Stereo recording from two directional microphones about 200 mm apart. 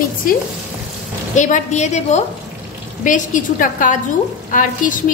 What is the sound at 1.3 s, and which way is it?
A woman's voice, 35° left (ahead or behind).